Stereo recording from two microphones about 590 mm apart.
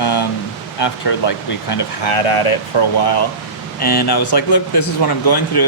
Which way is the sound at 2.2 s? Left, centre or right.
Left.